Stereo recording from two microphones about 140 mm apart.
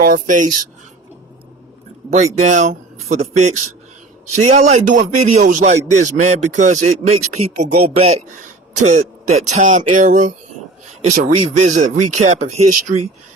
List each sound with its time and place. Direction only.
0.0 s speech: 75° right (ahead or behind)
2.1 s a man's voice: 60° right (ahead or behind)